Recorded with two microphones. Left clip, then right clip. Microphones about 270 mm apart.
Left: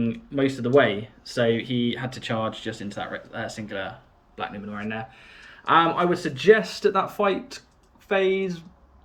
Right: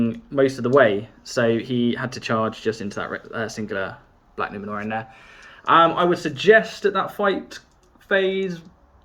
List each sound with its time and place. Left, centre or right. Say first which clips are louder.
0.1 s speech: right 5 dB; centre